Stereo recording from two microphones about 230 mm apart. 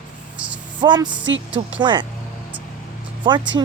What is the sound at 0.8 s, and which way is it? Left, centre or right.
Speech, centre.